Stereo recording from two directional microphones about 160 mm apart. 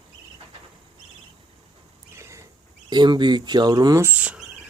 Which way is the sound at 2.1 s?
15° right (ahead or behind).